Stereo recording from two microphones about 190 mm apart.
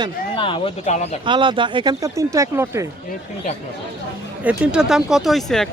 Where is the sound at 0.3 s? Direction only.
25° left (ahead or behind).